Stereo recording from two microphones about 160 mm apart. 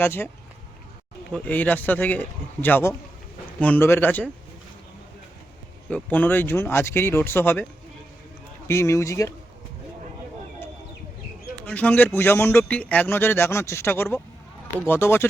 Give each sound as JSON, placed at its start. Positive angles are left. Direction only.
{"t": 0.0, "sound": "a man's voice", "side_deg": 15}
{"t": 1.3, "sound": "a man's voice", "side_deg": 10}
{"t": 5.9, "sound": "a man's voice", "side_deg": 10}
{"t": 11.6, "sound": "a man's voice", "side_deg": 10}